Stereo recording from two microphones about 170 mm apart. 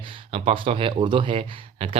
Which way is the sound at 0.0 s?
30° right (ahead or behind).